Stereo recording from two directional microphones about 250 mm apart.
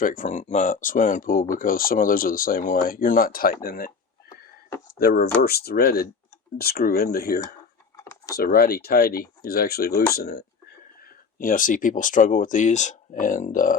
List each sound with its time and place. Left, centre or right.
0.0 s speech: left
4.9 s speech: left
7.9 s computer keyboard: centre
8.4 s speech: left